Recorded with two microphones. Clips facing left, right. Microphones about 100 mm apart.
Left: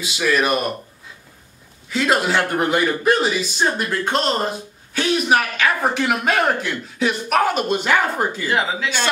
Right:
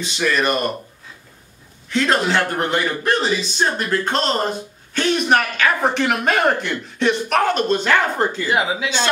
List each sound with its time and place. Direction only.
0.0 s a man's voice: 5° left (ahead or behind)
1.9 s a man's voice: 5° left (ahead or behind)
8.5 s speech: 15° right (ahead or behind)